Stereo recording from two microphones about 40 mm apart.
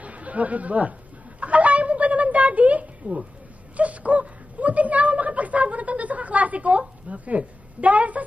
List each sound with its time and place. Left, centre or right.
0.0 s speech: right
1.4 s a sound: right
7.1 s a woman's voice: right